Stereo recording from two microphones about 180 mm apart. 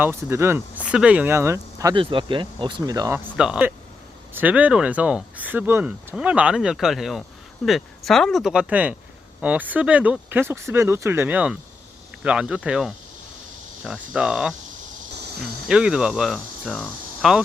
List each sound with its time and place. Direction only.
0.0 s speech: 15° right (ahead or behind)
3.3 s speech: 5° right (ahead or behind)